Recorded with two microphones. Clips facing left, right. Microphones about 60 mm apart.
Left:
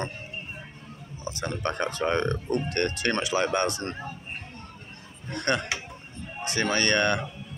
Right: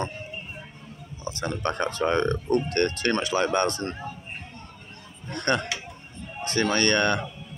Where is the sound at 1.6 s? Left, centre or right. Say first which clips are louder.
Right 2 dB; centre.